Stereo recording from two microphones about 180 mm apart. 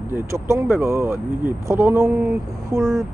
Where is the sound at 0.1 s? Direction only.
15° right (ahead or behind).